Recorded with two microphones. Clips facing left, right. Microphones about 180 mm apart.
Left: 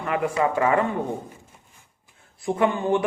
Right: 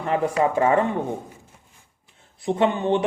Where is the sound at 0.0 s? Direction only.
30° right (ahead or behind).